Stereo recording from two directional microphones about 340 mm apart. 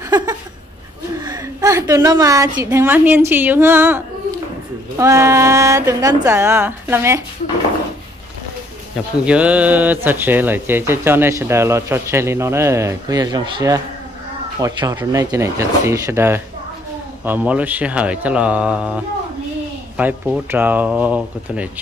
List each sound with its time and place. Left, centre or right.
0.1 s a sound: centre
1.2 s speech: centre
9.2 s speech: centre